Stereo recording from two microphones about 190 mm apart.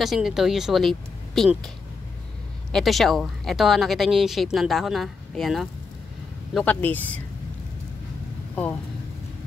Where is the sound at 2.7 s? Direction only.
Centre (ahead or behind).